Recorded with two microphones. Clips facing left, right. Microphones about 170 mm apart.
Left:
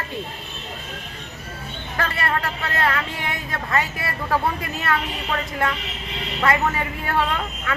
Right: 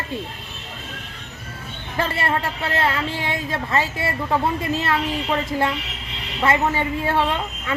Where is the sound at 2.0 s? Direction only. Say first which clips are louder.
Right 2 dB; 25° right (ahead or behind).